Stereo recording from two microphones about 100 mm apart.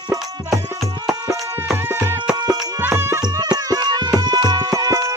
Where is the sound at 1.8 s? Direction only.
25° right (ahead or behind).